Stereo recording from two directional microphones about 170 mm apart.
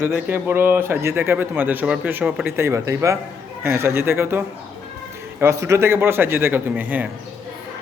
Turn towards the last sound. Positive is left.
turn(degrees=-10)  # may be behind; listen again after turning